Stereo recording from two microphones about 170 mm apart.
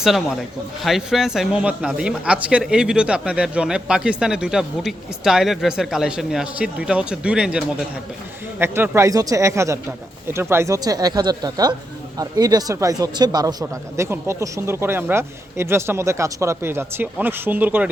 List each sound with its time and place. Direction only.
0.0 s speech: centre (ahead or behind)